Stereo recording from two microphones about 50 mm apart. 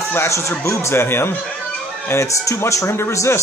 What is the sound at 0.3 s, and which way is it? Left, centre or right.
Speech, left.